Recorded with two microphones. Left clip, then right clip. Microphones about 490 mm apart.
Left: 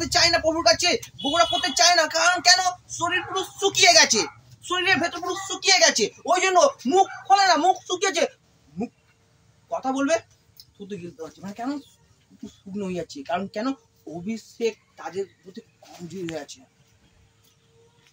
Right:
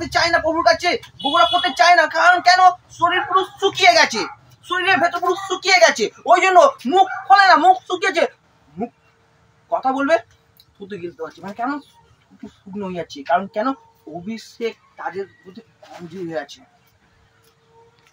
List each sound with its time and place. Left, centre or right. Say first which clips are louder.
0.0 s a man's voice: right 3 dB; left
9.7 s a man's voice: right 6 dB; left